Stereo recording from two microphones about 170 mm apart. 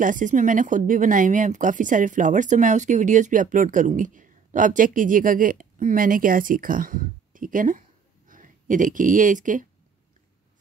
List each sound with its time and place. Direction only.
0.0 s speech: 50° right (ahead or behind)